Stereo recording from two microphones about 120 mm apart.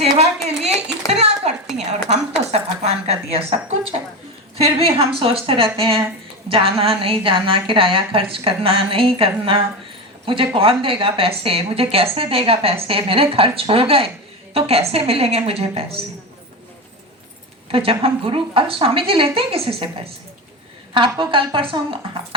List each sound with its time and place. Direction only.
0.0 s a woman's voice: 60° right (ahead or behind)
17.7 s a woman's voice: 50° right (ahead or behind)
20.9 s a woman's voice: 45° right (ahead or behind)